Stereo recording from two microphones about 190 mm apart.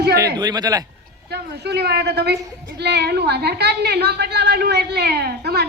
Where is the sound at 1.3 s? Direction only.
60° right (ahead or behind).